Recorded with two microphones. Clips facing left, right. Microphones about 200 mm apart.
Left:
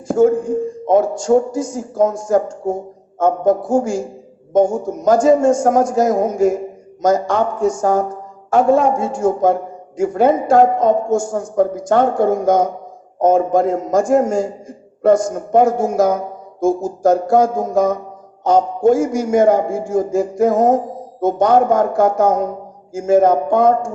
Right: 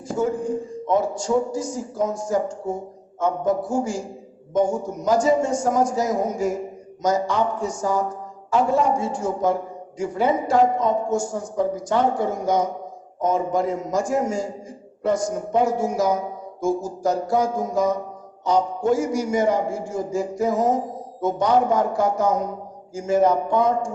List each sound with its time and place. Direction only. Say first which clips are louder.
0.1 s a man's voice: left 9 dB; 50° left (ahead or behind)